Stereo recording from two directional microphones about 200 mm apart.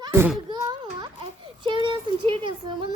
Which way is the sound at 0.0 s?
10° right (ahead or behind).